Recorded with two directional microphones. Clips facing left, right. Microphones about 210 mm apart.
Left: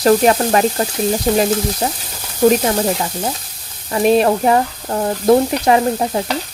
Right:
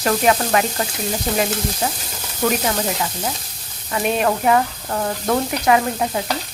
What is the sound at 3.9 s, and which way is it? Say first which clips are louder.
Speech: left 7 dB; 35° left (ahead or behind).